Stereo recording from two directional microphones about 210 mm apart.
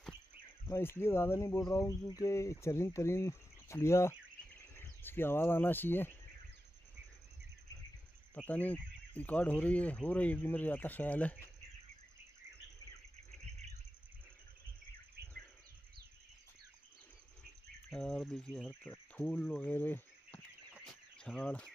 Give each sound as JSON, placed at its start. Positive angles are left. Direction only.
{"t": 0.7, "sound": "speech", "side_deg": 10}
{"t": 8.4, "sound": "speech", "side_deg": 5}
{"t": 15.2, "sound": "a sound", "side_deg": -50}
{"t": 17.8, "sound": "speech", "side_deg": 0}
{"t": 20.7, "sound": "cricket", "side_deg": 0}